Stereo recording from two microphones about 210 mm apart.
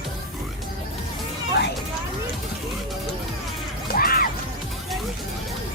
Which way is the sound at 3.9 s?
45° left (ahead or behind).